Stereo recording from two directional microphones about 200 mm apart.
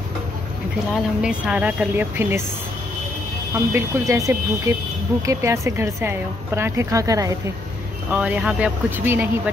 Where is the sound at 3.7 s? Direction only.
15° right (ahead or behind).